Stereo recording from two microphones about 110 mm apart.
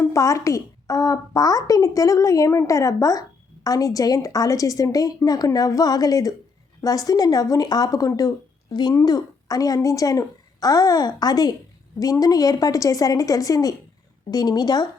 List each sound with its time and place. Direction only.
0.0 s a woman's voice: 30° left (ahead or behind)